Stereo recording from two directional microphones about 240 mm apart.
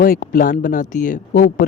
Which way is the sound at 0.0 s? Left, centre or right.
Left.